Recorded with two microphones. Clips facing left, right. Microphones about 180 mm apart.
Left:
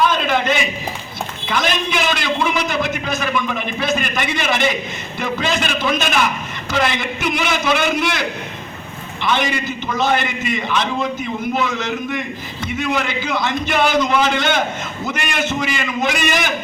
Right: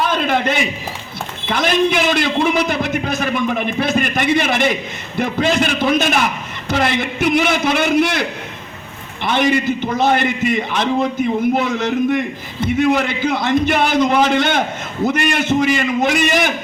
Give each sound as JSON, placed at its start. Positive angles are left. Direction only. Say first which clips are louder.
{"t": 0.1, "sound": "a man's voice", "louder": "right 1 dB", "side_deg": -55}
{"t": 9.2, "sound": "a man's voice", "louder": "right 4 dB", "side_deg": -55}